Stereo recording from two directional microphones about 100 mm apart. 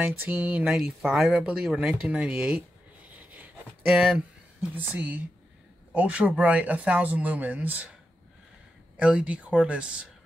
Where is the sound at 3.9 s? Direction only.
5° right (ahead or behind).